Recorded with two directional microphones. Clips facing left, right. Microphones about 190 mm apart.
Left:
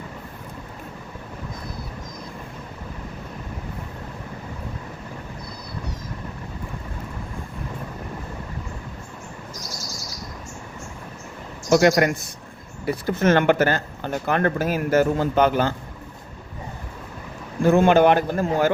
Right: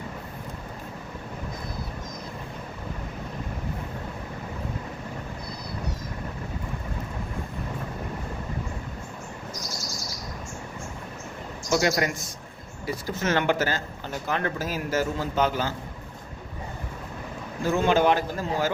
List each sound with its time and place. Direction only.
11.7 s speech: 60° left (ahead or behind)
17.6 s speech: 55° left (ahead or behind)